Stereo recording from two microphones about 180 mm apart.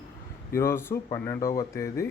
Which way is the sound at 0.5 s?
15° left (ahead or behind).